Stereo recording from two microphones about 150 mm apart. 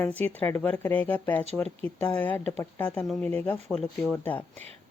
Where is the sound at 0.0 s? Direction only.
10° left (ahead or behind).